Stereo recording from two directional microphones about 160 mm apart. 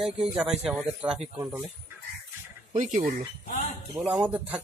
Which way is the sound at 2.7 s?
50° right (ahead or behind).